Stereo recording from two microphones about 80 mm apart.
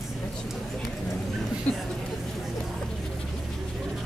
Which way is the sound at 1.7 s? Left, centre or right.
Centre.